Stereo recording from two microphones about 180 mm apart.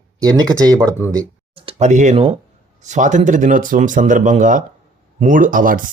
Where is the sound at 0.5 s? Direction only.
20° right (ahead or behind).